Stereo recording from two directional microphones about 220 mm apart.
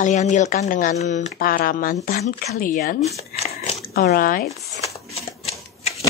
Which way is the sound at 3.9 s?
40° left (ahead or behind).